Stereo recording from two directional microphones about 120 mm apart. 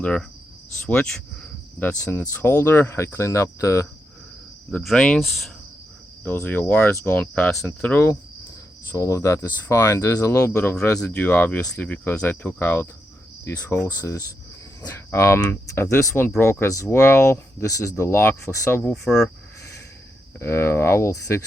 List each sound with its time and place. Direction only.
0.0 s speech: 10° left (ahead or behind)
0.9 s cricket: 10° left (ahead or behind)
2.3 s speech: 15° left (ahead or behind)
4.8 s speech: 5° left (ahead or behind)
6.2 s speech: 15° left (ahead or behind)
13.4 s cricket: 20° left (ahead or behind)
14.0 s speech: 25° left (ahead or behind)
18.8 s speech: 10° left (ahead or behind)
20.4 s speech: 20° left (ahead or behind)